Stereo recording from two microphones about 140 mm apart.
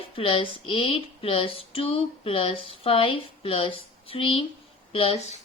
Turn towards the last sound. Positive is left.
turn(degrees=40)  # may be behind; listen again after turning